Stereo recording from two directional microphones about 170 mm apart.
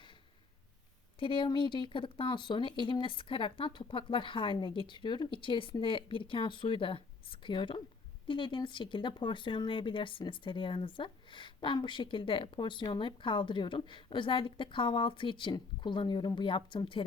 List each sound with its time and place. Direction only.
1.2 s speech: 30° left (ahead or behind)